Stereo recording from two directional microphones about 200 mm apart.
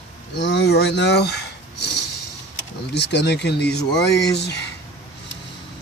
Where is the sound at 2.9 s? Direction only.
55° left (ahead or behind).